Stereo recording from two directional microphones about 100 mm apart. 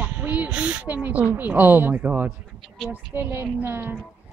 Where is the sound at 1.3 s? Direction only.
20° right (ahead or behind).